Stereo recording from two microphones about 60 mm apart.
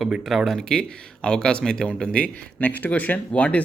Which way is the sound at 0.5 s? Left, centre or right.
Centre.